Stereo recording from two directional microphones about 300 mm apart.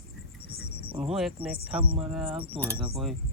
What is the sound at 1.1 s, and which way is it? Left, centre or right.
Speech, centre.